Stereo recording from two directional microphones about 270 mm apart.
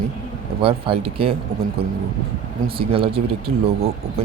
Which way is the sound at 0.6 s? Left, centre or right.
Centre.